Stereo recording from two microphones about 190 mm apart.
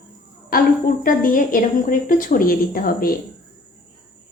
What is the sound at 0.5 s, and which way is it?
A woman's voice, 50° left (ahead or behind).